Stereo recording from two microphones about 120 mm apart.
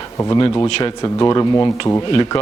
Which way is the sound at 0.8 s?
35° left (ahead or behind).